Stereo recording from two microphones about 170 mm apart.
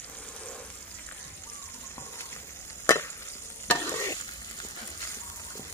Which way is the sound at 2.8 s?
15° left (ahead or behind).